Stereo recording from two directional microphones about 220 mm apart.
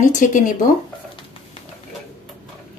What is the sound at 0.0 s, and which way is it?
Speech, 35° left (ahead or behind).